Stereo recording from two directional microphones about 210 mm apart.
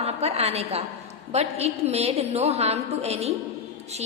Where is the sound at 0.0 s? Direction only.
30° right (ahead or behind).